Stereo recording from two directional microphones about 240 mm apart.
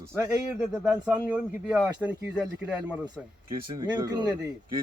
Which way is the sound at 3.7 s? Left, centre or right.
Centre.